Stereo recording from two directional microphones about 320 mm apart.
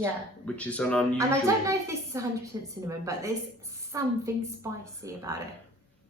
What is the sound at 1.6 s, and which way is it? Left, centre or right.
A woman's voice, centre.